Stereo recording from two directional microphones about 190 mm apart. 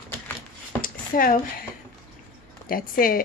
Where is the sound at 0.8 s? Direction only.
45° left (ahead or behind).